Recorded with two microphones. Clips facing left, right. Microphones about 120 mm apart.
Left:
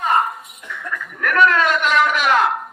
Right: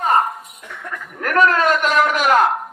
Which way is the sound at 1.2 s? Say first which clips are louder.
Right 1 dB; 40° right (ahead or behind).